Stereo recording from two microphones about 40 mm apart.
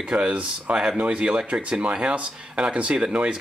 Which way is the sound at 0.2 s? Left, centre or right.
Right.